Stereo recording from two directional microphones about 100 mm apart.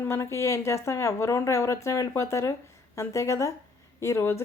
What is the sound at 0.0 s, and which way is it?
Speech, 25° left (ahead or behind).